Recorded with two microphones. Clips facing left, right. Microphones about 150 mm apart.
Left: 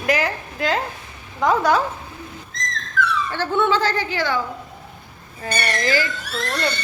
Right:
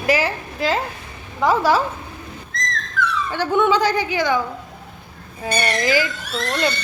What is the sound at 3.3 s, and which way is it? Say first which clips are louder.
A woman's voice: right 4 dB; 15° right (ahead or behind).